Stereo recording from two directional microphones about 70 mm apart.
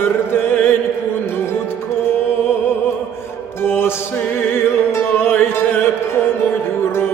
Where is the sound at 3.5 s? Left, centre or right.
Left.